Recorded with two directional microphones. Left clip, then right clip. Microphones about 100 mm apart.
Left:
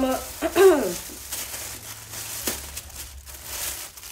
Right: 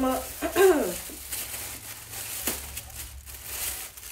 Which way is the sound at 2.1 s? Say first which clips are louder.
Left 3 dB; 35° left (ahead or behind).